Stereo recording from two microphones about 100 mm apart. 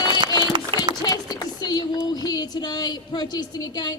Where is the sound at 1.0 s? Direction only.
40° left (ahead or behind).